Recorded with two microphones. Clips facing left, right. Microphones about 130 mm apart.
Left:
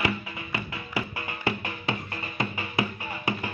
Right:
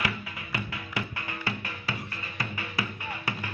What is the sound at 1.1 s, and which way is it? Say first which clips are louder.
Music: left 4 dB; 20° left (ahead or behind).